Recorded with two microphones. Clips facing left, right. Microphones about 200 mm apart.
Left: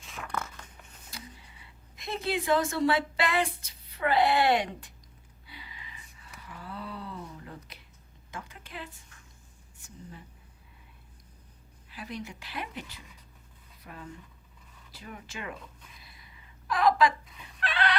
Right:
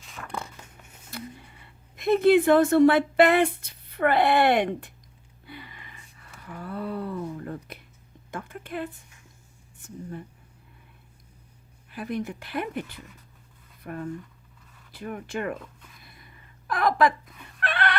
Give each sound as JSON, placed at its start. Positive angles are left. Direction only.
{"t": 0.3, "sound": "a sound", "side_deg": -15}
{"t": 1.1, "sound": "speech", "side_deg": -55}
{"t": 5.5, "sound": "a sound", "side_deg": -55}
{"t": 9.7, "sound": "speech", "side_deg": -55}
{"t": 11.9, "sound": "speech", "side_deg": -55}
{"t": 16.0, "sound": "chicken", "side_deg": -55}